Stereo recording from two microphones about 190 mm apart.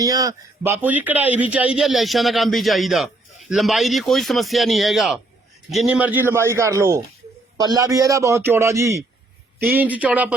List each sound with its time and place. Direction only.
0.0 s a man's voice: 20° right (ahead or behind)